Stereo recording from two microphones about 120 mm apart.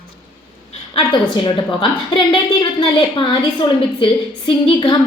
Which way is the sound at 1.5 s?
45° left (ahead or behind).